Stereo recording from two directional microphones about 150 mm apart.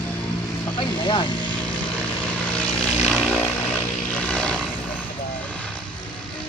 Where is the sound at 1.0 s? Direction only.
30° left (ahead or behind).